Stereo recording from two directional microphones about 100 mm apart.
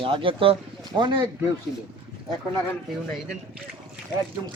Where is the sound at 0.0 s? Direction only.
60° right (ahead or behind).